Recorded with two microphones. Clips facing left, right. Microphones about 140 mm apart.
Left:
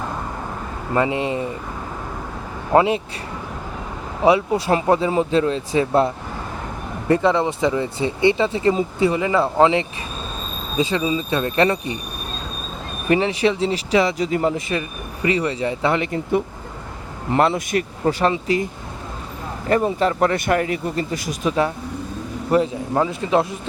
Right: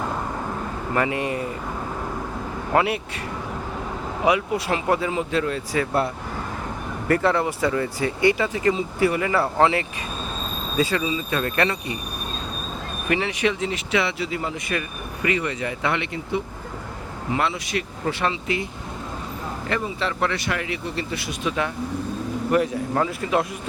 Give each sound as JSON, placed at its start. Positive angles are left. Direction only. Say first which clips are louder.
{"t": 0.9, "sound": "speech", "louder": "left 4 dB", "side_deg": 20}
{"t": 2.7, "sound": "speech", "louder": "left 5 dB", "side_deg": 25}
{"t": 4.3, "sound": "speech", "louder": "left 5 dB", "side_deg": 30}
{"t": 7.1, "sound": "speech", "louder": "left 3 dB", "side_deg": 20}
{"t": 11.0, "sound": "speech", "louder": "left 4 dB", "side_deg": 35}
{"t": 11.3, "sound": "speech", "louder": "left 5 dB", "side_deg": 25}
{"t": 13.1, "sound": "speech", "louder": "left 5 dB", "side_deg": 30}
{"t": 14.5, "sound": "speech", "louder": "left 4 dB", "side_deg": 25}
{"t": 19.8, "sound": "speech", "louder": "left 7 dB", "side_deg": 45}
{"t": 22.5, "sound": "speech", "louder": "left 3 dB", "side_deg": 25}